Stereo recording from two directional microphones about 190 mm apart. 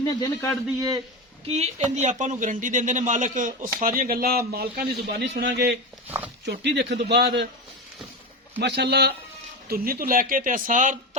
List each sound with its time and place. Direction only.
0.0 s a man's voice: 20° left (ahead or behind)
0.8 s a man's voice: 20° right (ahead or behind)
1.5 s a man's voice: 35° right (ahead or behind); by 5.7 s 60° right (ahead or behind)
6.1 s speech: 10° right (ahead or behind)
6.4 s a man's voice: 65° right (ahead or behind)
8.6 s a man's voice: 60° right (ahead or behind); by 11.2 s 40° right (ahead or behind)